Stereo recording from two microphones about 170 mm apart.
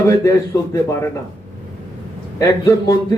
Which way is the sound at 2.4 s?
20° left (ahead or behind).